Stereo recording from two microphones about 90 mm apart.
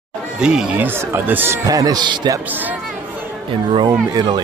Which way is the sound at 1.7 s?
45° right (ahead or behind).